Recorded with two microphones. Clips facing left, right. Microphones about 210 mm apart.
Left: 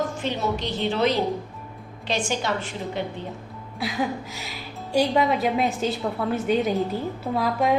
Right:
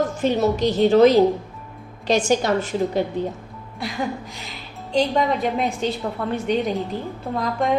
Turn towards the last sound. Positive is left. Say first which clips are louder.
# even
turn(degrees=5)  # may be behind; listen again after turning